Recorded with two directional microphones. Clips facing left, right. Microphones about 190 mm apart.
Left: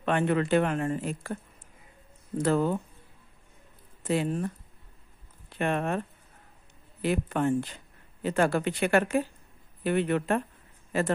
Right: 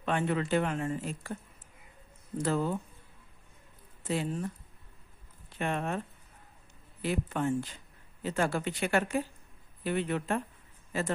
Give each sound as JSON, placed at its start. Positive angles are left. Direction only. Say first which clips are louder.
{"t": 0.0, "sound": "speech", "louder": "left 5 dB", "side_deg": 60}
{"t": 4.1, "sound": "speech", "louder": "left 5 dB", "side_deg": 60}
{"t": 5.6, "sound": "speech", "louder": "left 4 dB", "side_deg": 60}